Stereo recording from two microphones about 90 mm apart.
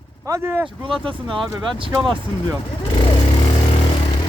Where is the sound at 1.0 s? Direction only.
70° right (ahead or behind).